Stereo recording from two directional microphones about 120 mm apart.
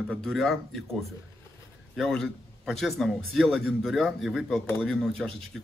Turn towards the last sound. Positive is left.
turn(degrees=5)  # may be behind; listen again after turning